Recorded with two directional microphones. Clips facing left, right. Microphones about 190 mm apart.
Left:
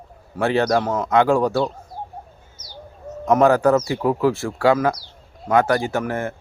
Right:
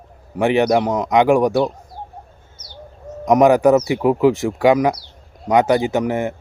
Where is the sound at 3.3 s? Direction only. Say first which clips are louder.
Right 3 dB; 15° right (ahead or behind).